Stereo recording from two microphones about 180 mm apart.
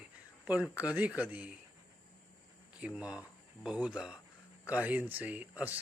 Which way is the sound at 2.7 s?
5° right (ahead or behind).